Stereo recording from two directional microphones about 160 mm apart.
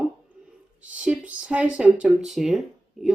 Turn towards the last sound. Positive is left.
turn(degrees=0)  # may be behind; listen again after turning